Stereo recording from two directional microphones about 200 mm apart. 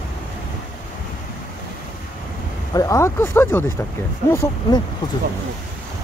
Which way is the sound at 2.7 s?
15° left (ahead or behind).